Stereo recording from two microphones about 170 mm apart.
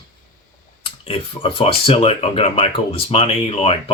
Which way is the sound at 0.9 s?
35° left (ahead or behind).